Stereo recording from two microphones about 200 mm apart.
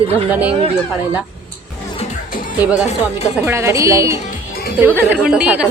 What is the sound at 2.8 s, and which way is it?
Speech, 30° left (ahead or behind).